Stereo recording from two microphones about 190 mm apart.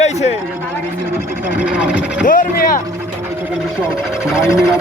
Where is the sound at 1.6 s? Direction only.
5° right (ahead or behind).